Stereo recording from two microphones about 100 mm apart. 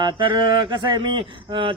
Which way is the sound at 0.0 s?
55° right (ahead or behind).